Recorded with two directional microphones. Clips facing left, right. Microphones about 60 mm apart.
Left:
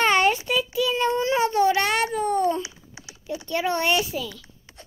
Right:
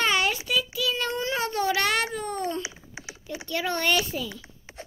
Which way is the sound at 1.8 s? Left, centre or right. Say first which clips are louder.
Left 3 dB; centre.